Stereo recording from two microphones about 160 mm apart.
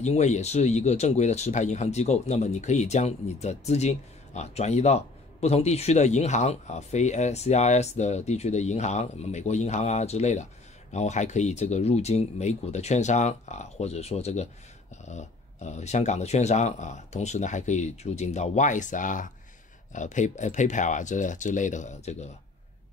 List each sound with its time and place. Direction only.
0.0 s speech: 45° left (ahead or behind)